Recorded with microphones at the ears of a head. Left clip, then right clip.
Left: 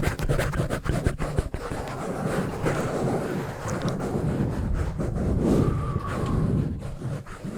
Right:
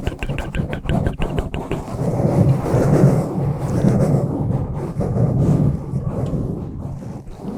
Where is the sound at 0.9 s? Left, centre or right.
Right.